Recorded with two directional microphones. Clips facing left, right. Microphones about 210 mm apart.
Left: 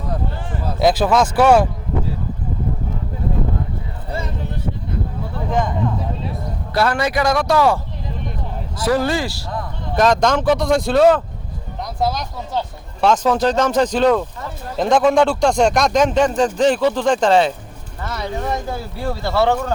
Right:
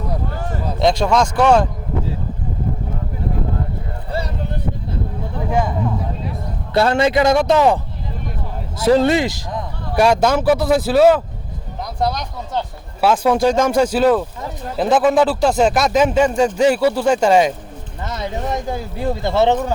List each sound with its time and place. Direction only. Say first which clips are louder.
0.8 s speech: left 1 dB; 5° left (ahead or behind)
5.5 s a sound: right 1 dB; 10° right (ahead or behind)
6.7 s speech: right 4 dB; 25° right (ahead or behind)
8.8 s speech: right 5 dB; 25° right (ahead or behind)
18.0 s speech: even; 20° right (ahead or behind)